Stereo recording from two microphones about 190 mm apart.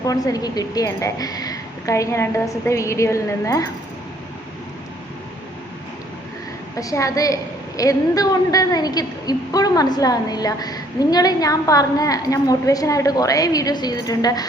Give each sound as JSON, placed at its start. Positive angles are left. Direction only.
{"t": 0.0, "sound": "a woman's voice", "side_deg": 20}
{"t": 6.7, "sound": "a woman's voice", "side_deg": 15}